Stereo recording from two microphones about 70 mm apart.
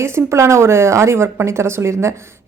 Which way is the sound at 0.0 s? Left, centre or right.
Right.